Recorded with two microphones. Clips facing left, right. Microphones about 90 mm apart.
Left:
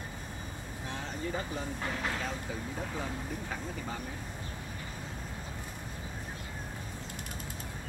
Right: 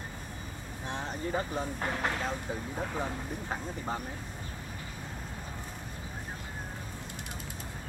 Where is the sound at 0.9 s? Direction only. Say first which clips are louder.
Right 3 dB; 40° right (ahead or behind).